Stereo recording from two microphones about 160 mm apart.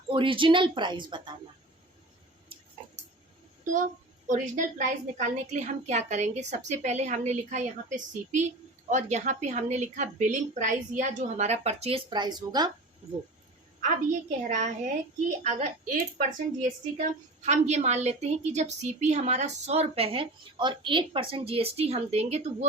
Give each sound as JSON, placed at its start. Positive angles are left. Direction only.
{"t": 0.1, "sound": "speech", "side_deg": -30}
{"t": 3.6, "sound": "a woman's voice", "side_deg": -55}
{"t": 13.8, "sound": "a woman's voice", "side_deg": -50}
{"t": 17.0, "sound": "a woman's voice", "side_deg": -45}